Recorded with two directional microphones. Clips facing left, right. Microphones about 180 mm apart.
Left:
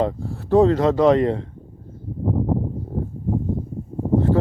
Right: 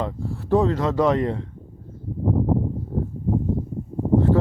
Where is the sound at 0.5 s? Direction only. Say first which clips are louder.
Left 4 dB; 35° left (ahead or behind).